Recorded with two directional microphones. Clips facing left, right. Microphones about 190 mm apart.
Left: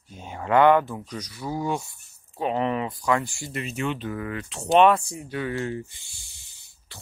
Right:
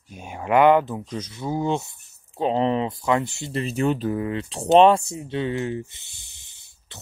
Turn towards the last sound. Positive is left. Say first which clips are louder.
# right 2 dB
turn(degrees=-20)  # may be behind; listen again after turning